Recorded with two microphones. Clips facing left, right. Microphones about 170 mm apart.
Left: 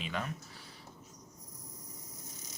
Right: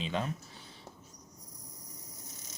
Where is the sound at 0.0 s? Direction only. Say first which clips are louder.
Right 4 dB; 25° right (ahead or behind).